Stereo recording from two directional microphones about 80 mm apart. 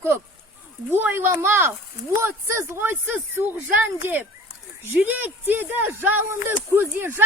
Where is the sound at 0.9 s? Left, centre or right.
Right.